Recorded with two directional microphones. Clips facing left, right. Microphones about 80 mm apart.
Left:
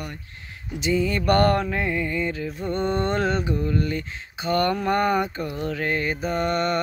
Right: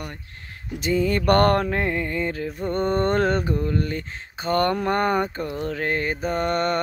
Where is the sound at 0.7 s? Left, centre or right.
Right.